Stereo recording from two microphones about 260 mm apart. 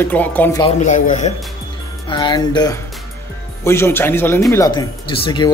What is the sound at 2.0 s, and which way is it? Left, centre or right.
Speech, centre.